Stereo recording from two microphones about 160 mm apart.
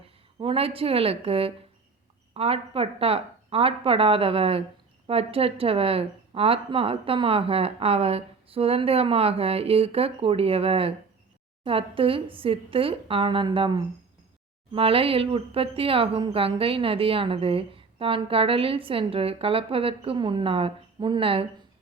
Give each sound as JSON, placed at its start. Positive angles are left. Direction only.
{"t": 0.3, "sound": "speech", "side_deg": -35}